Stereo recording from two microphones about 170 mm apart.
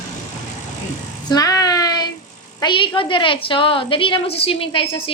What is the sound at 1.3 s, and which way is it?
Child singing, 20° left (ahead or behind).